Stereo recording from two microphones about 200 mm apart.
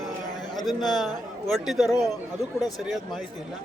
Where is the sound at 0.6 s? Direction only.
Centre (ahead or behind).